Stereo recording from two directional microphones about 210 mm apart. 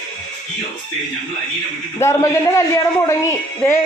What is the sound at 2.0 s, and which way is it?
Speech, 15° left (ahead or behind).